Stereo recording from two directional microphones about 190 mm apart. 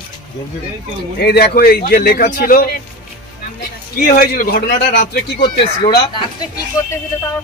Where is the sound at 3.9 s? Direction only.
50° left (ahead or behind).